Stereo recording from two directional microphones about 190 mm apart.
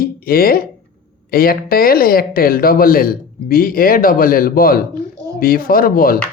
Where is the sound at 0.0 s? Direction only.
50° left (ahead or behind).